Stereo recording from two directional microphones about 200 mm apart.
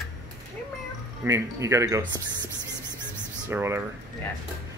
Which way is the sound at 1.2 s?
15° right (ahead or behind).